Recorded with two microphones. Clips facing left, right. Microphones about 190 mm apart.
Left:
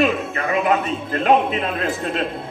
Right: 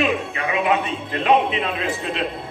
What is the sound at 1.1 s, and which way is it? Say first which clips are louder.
A man's voice: left 1 dB; 45° left (ahead or behind).